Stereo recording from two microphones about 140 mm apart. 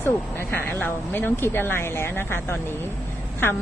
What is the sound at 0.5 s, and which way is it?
Speech, 15° left (ahead or behind).